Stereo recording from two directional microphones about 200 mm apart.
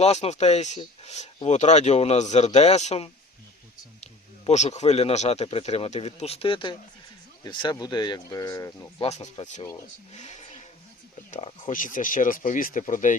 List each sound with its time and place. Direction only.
0.0 s speech: 35° left (ahead or behind); by 8.9 s 15° left (ahead or behind)
9.0 s speech: 35° left (ahead or behind)
10.1 s vehicle: 35° left (ahead or behind)
11.3 s speech: 35° left (ahead or behind)